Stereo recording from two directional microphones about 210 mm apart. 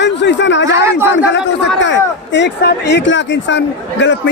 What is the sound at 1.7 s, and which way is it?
Speech, 60° left (ahead or behind).